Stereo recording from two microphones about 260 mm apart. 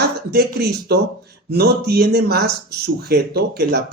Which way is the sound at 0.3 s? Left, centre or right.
Right.